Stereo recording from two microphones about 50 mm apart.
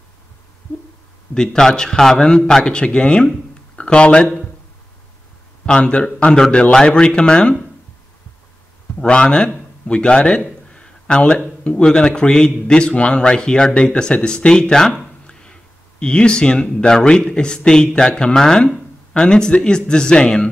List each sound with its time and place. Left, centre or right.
1.3 s speech: centre
5.7 s speech: left
9.0 s speech: centre
16.0 s speech: centre